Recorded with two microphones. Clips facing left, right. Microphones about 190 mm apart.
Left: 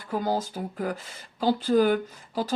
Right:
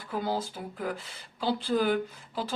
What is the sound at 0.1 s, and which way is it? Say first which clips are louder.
Speech: left 4 dB; 45° left (ahead or behind).